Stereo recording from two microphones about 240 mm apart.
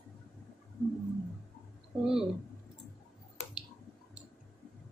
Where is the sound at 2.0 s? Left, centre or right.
Centre.